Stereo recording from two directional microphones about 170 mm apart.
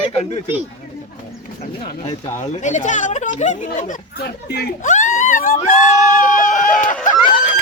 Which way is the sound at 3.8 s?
65° left (ahead or behind).